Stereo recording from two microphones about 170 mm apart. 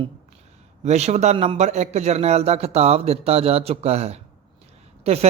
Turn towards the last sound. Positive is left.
turn(degrees=-35)  # may be behind; listen again after turning